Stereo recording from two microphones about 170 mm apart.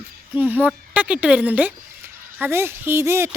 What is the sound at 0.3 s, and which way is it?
Speech, 10° right (ahead or behind).